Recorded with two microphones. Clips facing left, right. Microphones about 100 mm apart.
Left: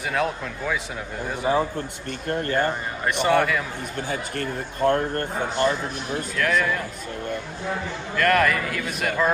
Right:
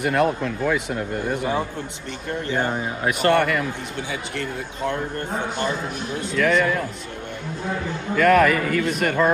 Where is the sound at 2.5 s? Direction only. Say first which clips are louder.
Right 2 dB; 10° right (ahead or behind).